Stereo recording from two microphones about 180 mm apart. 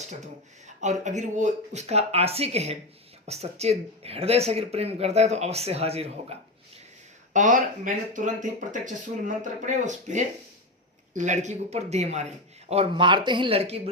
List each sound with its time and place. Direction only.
0.8 s speech: 40° right (ahead or behind)
7.3 s speech: 45° right (ahead or behind)